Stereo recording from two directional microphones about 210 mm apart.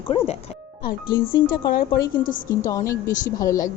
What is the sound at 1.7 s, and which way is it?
Speech, 45° left (ahead or behind).